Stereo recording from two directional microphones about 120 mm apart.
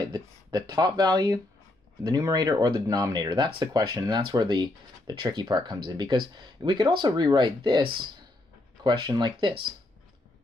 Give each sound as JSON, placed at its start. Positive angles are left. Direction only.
{"t": 0.0, "sound": "speech", "side_deg": -35}
{"t": 3.6, "sound": "speech", "side_deg": -30}